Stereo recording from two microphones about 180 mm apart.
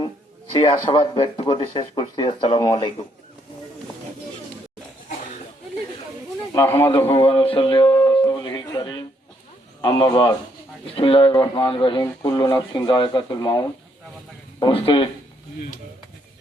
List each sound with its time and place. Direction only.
0.5 s speech: 30° left (ahead or behind)
6.5 s speech: 15° left (ahead or behind)
7.1 s a sound: 30° left (ahead or behind)
9.8 s speech: 25° left (ahead or behind)